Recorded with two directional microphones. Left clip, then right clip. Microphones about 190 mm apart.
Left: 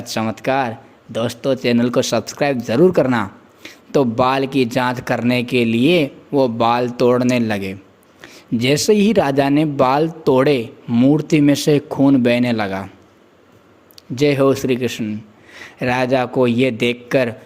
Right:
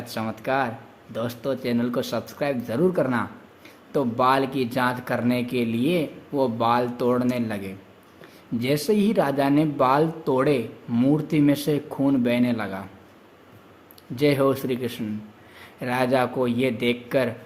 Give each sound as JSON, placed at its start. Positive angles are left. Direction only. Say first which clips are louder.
{"t": 0.0, "sound": "speech", "louder": "left 8 dB", "side_deg": 40}
{"t": 10.8, "sound": "speech", "louder": "left 8 dB", "side_deg": 30}
{"t": 14.2, "sound": "speech", "louder": "left 6 dB", "side_deg": 35}